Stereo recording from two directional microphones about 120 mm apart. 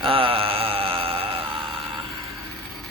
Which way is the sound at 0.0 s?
50° right (ahead or behind).